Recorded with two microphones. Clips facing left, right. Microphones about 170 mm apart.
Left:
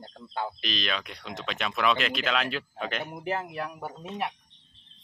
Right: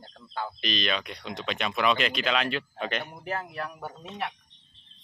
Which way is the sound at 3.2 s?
15° left (ahead or behind).